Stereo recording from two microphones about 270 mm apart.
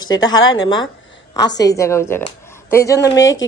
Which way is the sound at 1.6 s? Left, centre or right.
Centre.